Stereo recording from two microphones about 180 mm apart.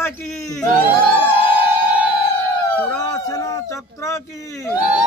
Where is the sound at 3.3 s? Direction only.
20° left (ahead or behind).